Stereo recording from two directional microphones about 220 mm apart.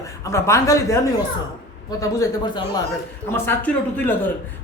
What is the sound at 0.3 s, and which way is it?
A woman's voice, 15° left (ahead or behind).